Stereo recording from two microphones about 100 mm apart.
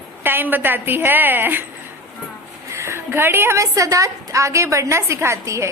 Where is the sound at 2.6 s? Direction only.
30° right (ahead or behind).